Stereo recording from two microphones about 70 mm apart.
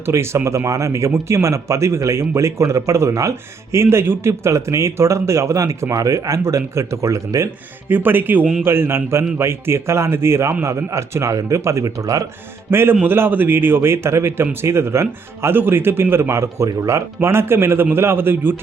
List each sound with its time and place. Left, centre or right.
0.0 s speech: right
7.9 s speech: right
12.7 s speech: right
17.2 s speech: right